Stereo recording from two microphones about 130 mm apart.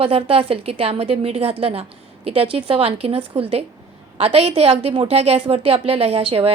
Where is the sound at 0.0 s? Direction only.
45° right (ahead or behind).